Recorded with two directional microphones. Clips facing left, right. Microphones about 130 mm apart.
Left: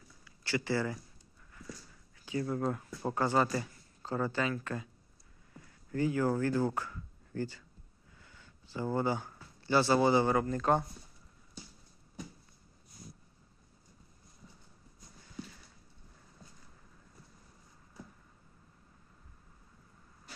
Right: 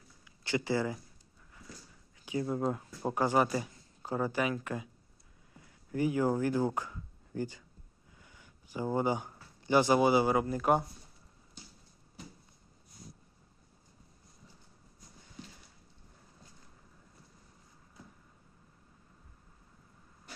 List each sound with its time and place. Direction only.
0.3 s speech: 20° right (ahead or behind)
2.1 s a man's voice: 15° right (ahead or behind)